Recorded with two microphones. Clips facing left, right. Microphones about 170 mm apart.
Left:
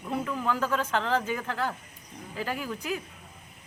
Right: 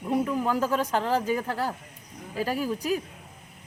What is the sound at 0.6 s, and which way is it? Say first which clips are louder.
Speech: right 3 dB; 35° right (ahead or behind).